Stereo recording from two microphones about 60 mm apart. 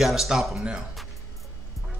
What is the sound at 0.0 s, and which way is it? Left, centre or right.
A man's voice, centre.